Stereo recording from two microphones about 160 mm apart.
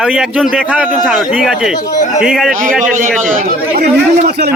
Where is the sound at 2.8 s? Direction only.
50° right (ahead or behind).